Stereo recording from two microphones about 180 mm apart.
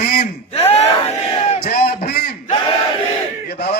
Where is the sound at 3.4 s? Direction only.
60° left (ahead or behind).